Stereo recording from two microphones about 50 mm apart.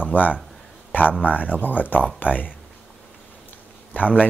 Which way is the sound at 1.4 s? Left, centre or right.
Left.